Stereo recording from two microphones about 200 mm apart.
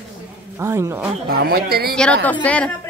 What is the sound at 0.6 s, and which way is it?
Speech, 15° right (ahead or behind).